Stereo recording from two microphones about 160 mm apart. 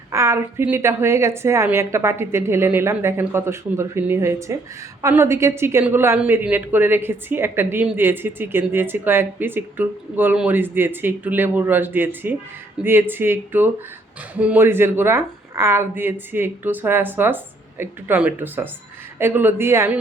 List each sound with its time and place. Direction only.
0.1 s speech: 15° right (ahead or behind)